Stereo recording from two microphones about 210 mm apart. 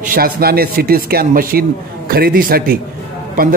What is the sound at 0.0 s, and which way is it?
A man's voice, 45° right (ahead or behind).